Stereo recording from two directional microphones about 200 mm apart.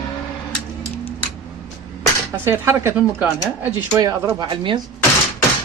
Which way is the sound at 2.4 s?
10° right (ahead or behind).